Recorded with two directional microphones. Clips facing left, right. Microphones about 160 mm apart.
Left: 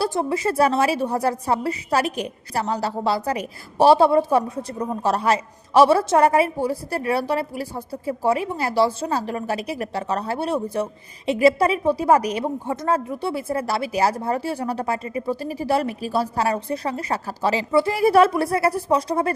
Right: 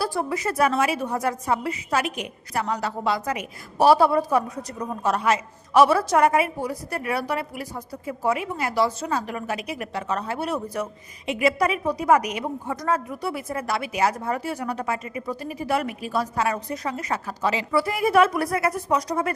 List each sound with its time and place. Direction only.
0.0 s a woman's voice: 25° left (ahead or behind)